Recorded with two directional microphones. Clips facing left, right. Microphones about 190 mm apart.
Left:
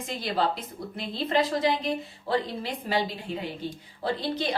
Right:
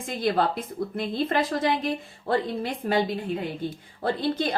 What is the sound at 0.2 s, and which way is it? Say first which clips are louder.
A woman's voice: right 4 dB; 50° right (ahead or behind).